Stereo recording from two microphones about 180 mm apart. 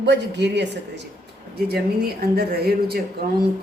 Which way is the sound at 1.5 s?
60° right (ahead or behind).